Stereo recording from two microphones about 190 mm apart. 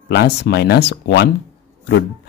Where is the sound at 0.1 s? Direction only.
60° left (ahead or behind).